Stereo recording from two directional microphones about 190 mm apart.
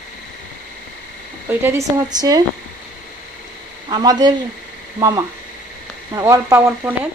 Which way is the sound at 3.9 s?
20° right (ahead or behind).